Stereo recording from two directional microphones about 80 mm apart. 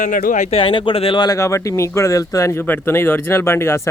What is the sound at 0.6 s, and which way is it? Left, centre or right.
Speech, left.